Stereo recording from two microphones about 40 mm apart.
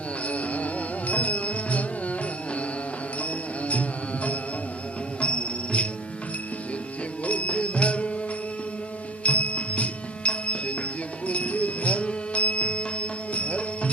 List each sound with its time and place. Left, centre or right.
0.3 s music: left
3.2 s carnatic music: left
5.2 s music: left
7.3 s music: left
9.2 s music: left